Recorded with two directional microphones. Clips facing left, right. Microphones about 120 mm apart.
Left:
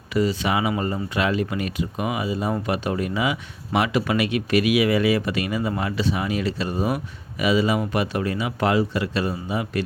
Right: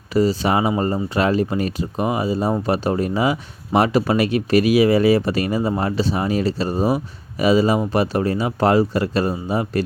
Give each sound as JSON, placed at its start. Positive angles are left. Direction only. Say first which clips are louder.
{"t": 0.1, "sound": "speech", "louder": "right 4 dB", "side_deg": -35}